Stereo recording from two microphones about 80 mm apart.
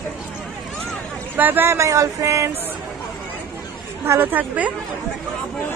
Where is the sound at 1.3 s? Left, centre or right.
Right.